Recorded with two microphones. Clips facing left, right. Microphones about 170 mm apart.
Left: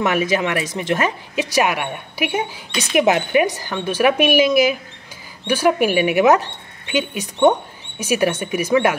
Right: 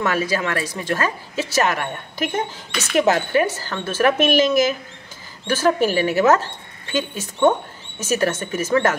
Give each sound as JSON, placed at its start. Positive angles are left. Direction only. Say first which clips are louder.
{"t": 0.0, "sound": "a woman's voice", "louder": "left 3 dB", "side_deg": 20}